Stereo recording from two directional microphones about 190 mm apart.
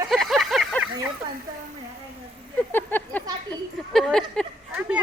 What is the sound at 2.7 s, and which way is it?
A woman's voice, 10° left (ahead or behind).